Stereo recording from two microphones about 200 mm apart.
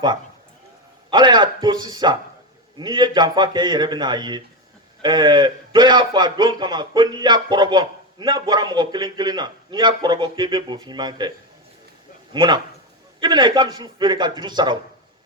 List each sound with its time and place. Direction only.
1.1 s a man's voice: 20° right (ahead or behind)